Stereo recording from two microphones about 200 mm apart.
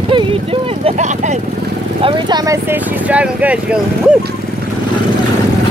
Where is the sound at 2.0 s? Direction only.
20° right (ahead or behind).